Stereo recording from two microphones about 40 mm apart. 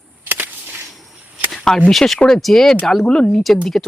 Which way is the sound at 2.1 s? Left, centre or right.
Left.